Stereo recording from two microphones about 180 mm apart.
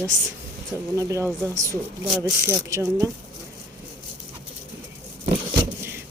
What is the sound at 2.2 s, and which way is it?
Speech, 20° right (ahead or behind).